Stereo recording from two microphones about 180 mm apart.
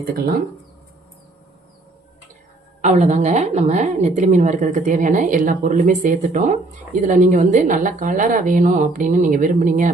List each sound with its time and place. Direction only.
2.8 s a woman's voice: 40° right (ahead or behind)